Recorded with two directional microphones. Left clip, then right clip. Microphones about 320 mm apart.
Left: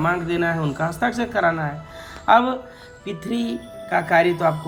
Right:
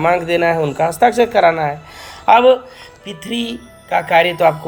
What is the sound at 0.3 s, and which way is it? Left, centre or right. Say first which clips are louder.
Speech: right 8 dB; right.